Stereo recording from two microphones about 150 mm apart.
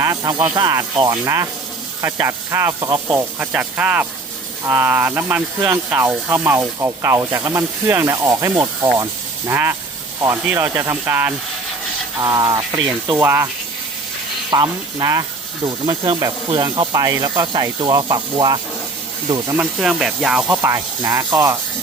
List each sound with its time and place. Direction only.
0.2 s speech: 30° right (ahead or behind); by 11.3 s 15° right (ahead or behind)
12.2 s speech: 25° right (ahead or behind)
14.5 s speech: 30° right (ahead or behind)
19.5 s speech: 5° right (ahead or behind)
20.6 s speech: 20° right (ahead or behind)